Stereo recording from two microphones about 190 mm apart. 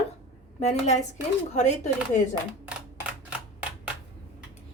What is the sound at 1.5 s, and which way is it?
Speech, 40° left (ahead or behind).